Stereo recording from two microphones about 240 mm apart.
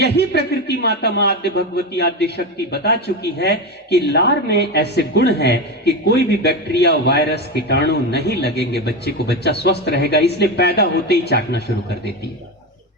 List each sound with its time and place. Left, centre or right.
0.0 s a man's voice: left